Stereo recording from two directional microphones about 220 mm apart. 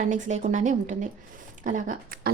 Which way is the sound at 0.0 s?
35° right (ahead or behind).